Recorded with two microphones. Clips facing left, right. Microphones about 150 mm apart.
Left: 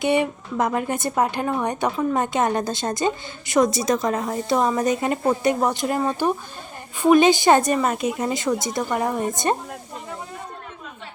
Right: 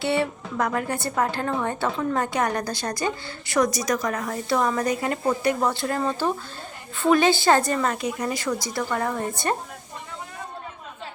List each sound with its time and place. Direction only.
0.0 s a woman's voice: 20° left (ahead or behind)